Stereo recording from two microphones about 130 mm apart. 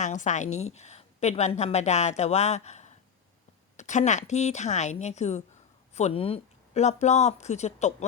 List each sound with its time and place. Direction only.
0.0 s a woman's voice: 70° left (ahead or behind)